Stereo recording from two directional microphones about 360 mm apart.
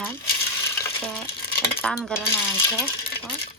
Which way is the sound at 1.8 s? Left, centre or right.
Centre.